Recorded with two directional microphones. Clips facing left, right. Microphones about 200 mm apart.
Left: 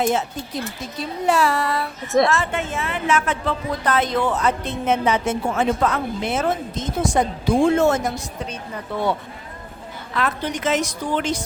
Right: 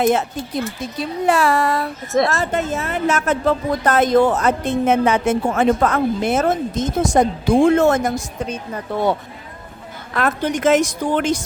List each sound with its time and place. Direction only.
0.0 s speech: 55° right (ahead or behind)
1.3 s a woman's voice: 50° right (ahead or behind)
10.2 s a woman's voice: 50° right (ahead or behind)